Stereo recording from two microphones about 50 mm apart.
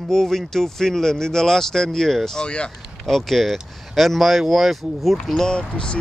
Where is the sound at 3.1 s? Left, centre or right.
Centre.